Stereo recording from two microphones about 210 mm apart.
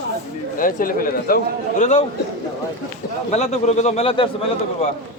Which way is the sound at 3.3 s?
30° left (ahead or behind).